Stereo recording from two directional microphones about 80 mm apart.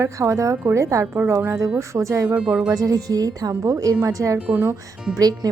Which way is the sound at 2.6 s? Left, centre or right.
Right.